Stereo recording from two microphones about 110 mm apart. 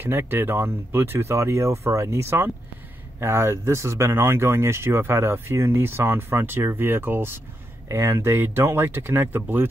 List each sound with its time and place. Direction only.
0.0 s speech: 20° right (ahead or behind)